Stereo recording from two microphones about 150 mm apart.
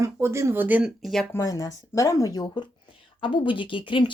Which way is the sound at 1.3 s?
25° left (ahead or behind).